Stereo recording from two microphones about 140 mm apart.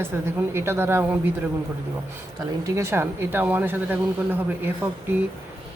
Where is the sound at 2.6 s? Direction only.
20° right (ahead or behind).